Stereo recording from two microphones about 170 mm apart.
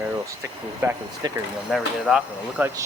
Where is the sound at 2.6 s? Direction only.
10° right (ahead or behind).